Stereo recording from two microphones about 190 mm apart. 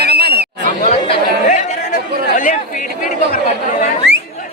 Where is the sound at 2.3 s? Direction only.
45° left (ahead or behind).